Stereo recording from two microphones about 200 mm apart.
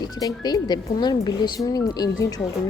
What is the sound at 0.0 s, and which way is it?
Speech, 20° left (ahead or behind).